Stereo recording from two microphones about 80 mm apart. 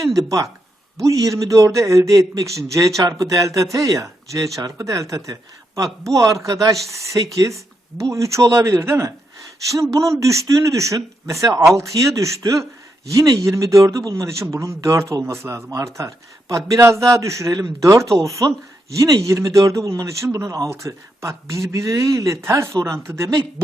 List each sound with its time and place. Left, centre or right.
0.0 s speech: right
20.7 s speech: right